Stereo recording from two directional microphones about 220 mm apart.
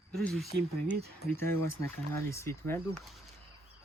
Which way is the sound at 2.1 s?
15° left (ahead or behind).